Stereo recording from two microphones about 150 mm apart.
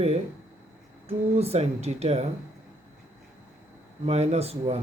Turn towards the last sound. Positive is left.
turn(degrees=-45)  # may be behind; listen again after turning